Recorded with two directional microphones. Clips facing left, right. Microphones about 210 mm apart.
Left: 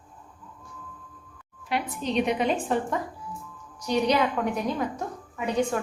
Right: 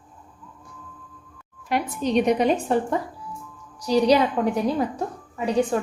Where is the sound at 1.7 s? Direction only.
45° right (ahead or behind).